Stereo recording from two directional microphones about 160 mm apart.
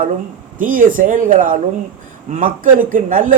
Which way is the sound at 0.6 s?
55° right (ahead or behind).